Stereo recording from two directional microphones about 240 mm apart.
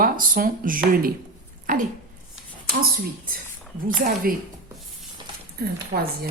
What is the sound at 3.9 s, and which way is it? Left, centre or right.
Speech, right.